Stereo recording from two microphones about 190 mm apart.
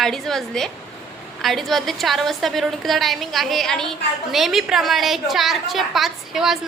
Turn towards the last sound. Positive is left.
turn(degrees=0)  # may be behind; listen again after turning